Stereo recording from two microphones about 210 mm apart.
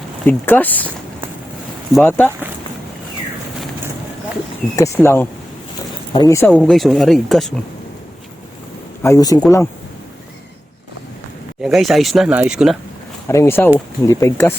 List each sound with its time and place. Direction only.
0.3 s speech: 10° left (ahead or behind)
1.9 s speech: 5° left (ahead or behind)
4.8 s speech: 10° left (ahead or behind)
6.5 s speech: centre (ahead or behind)
9.0 s speech: 15° left (ahead or behind)
11.6 s speech: centre (ahead or behind)
13.2 s speech: 15° left (ahead or behind)